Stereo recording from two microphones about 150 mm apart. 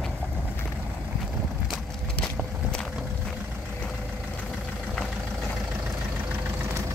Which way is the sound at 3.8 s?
10° left (ahead or behind).